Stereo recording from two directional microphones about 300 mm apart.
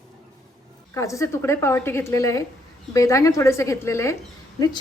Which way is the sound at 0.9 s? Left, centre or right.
Centre.